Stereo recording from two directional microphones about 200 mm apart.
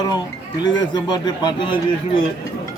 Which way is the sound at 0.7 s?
20° left (ahead or behind).